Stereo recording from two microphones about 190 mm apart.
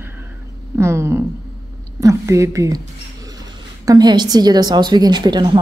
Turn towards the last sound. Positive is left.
turn(degrees=-25)  # may be behind; listen again after turning